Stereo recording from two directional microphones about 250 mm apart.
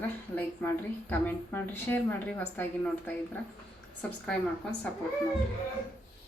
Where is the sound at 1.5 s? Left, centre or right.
Centre.